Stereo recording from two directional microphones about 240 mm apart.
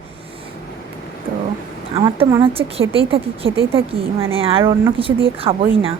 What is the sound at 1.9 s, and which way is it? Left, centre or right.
A woman's voice, right.